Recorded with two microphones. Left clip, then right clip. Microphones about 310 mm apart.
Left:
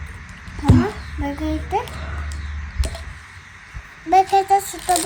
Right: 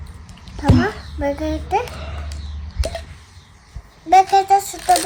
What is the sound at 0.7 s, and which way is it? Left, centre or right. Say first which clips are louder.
Speech: right 1 dB; left.